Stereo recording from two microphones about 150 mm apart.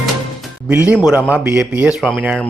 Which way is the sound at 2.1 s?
5° left (ahead or behind).